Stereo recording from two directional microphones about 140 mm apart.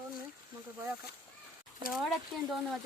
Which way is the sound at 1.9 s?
Centre (ahead or behind).